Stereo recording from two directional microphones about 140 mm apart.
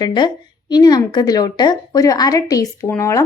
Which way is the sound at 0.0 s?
35° left (ahead or behind).